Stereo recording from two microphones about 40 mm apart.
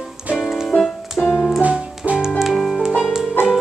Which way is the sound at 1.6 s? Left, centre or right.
Right.